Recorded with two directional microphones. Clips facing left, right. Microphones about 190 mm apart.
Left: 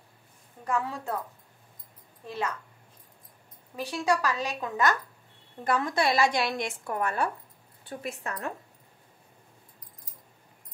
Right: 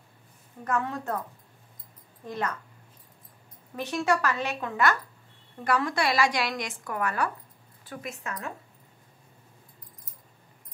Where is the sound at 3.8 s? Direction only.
15° left (ahead or behind); by 8.5 s 35° left (ahead or behind).